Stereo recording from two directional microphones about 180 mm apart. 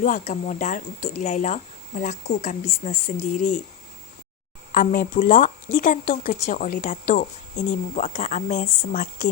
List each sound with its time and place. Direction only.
0.0 s speech: 45° left (ahead or behind)
4.7 s speech: 55° left (ahead or behind)